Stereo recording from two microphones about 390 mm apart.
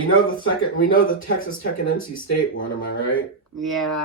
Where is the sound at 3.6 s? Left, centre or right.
Centre.